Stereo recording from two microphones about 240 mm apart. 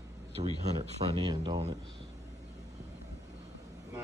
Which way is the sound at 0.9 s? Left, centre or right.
Right.